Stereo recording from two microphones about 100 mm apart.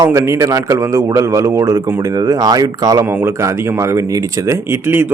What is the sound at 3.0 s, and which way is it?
Speech, 20° right (ahead or behind).